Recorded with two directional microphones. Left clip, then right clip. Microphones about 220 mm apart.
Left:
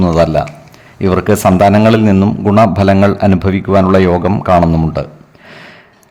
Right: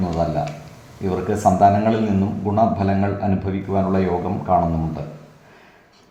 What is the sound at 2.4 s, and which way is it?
A man's voice, 50° left (ahead or behind).